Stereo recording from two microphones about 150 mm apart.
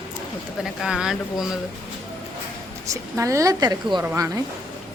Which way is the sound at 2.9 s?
20° right (ahead or behind).